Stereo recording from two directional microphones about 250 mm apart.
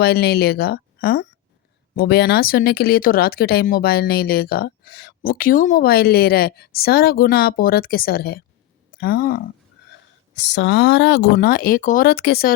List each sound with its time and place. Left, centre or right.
0.0 s speech: left